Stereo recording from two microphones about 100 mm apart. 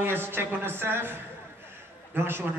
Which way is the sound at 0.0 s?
20° right (ahead or behind).